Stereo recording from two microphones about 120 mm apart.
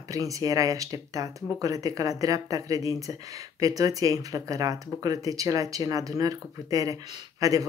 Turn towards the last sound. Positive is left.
turn(degrees=-30)  # may be behind; listen again after turning